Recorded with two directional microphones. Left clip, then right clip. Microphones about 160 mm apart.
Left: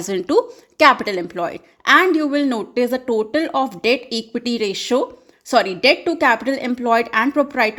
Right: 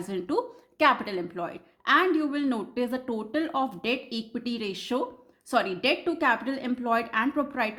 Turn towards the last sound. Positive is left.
turn(degrees=40)  # may be behind; listen again after turning